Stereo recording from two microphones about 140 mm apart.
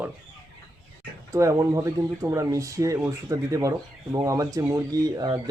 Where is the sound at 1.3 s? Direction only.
20° right (ahead or behind).